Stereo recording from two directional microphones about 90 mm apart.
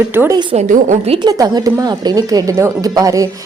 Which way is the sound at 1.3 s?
45° right (ahead or behind).